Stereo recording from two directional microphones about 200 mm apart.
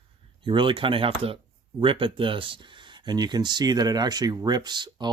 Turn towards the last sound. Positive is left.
turn(degrees=-20)  # may be behind; listen again after turning